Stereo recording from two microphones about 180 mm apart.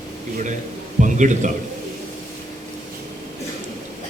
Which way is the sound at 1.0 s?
45° right (ahead or behind).